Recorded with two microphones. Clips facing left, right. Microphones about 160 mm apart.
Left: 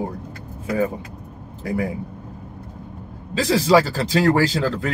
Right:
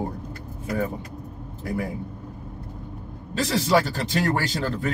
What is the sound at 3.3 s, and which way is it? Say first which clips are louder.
Speech: left 5 dB; 90° left.